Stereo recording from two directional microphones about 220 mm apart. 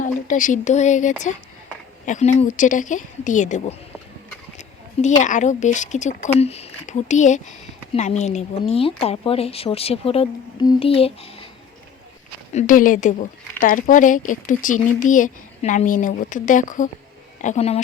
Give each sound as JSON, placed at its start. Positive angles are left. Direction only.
{"t": 0.0, "sound": "speech", "side_deg": 35}
{"t": 4.5, "sound": "a sound", "side_deg": 35}
{"t": 5.2, "sound": "a woman's voice", "side_deg": 35}
{"t": 12.5, "sound": "speech", "side_deg": 40}